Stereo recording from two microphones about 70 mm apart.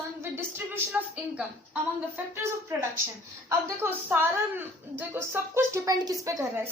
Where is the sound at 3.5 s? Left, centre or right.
Right.